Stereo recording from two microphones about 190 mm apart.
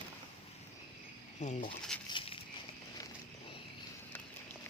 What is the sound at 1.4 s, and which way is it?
Speech, 35° left (ahead or behind).